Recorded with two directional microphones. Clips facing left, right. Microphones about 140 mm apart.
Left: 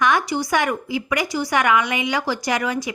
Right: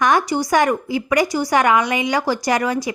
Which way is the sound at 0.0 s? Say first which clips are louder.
Right 3 dB; 40° right (ahead or behind).